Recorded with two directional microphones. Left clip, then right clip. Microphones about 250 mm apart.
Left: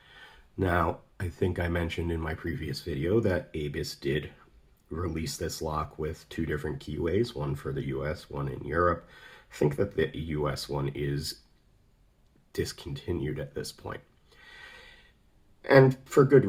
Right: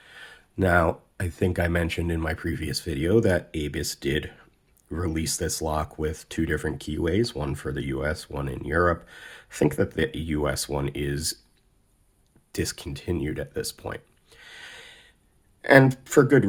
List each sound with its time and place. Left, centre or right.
0.0 s speech: right
12.5 s speech: right
14.4 s snort: right
15.6 s speech: right